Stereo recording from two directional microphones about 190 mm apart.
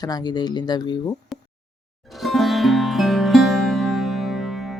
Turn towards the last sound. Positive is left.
turn(degrees=0)  # may be behind; listen again after turning